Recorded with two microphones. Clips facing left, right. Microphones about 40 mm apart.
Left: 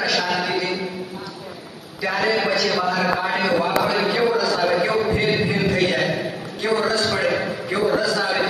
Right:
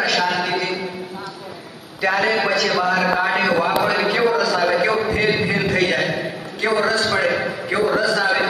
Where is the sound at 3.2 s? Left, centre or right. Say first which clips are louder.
Right 3 dB; right.